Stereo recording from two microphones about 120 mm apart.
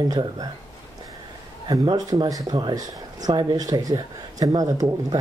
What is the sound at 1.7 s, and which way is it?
Speech, 35° right (ahead or behind).